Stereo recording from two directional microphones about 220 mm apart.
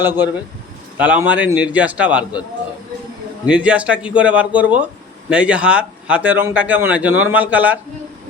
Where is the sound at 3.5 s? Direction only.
5° right (ahead or behind).